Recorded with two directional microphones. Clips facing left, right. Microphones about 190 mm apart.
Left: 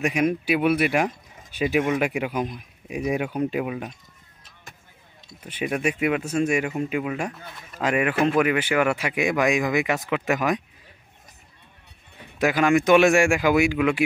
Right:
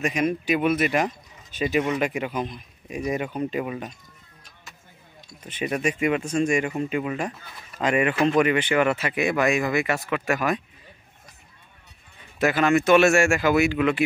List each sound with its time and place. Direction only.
0.0 s speech: 10° left (ahead or behind)
5.4 s speech: 10° left (ahead or behind)
12.4 s speech: 15° left (ahead or behind)